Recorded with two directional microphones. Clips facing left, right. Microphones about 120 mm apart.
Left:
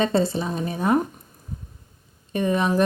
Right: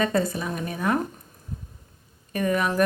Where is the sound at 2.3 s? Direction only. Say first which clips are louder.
Left 2 dB; 25° left (ahead or behind).